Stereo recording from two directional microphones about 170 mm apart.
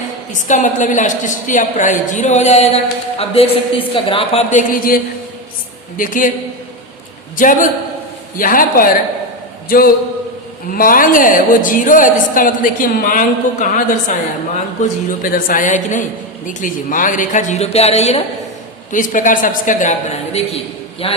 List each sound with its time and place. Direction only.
0.3 s a woman's voice: 45° left (ahead or behind)
6.0 s a woman's voice: 50° left (ahead or behind)
7.3 s a woman's voice: 50° left (ahead or behind)
18.9 s a woman's voice: 50° left (ahead or behind); by 21.2 s 35° left (ahead or behind)